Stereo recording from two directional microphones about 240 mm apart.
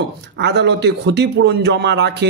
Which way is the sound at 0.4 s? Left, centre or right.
Right.